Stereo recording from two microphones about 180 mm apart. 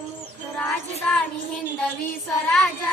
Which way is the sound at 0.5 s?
5° left (ahead or behind).